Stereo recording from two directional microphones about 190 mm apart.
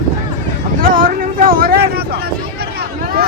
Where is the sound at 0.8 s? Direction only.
50° right (ahead or behind).